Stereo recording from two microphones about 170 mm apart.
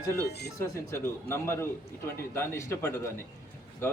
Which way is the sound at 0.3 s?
75° left (ahead or behind).